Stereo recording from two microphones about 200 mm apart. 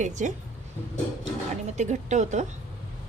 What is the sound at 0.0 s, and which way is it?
Speech, 40° right (ahead or behind).